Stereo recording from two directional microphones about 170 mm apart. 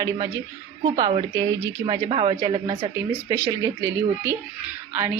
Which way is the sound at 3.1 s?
15° right (ahead or behind).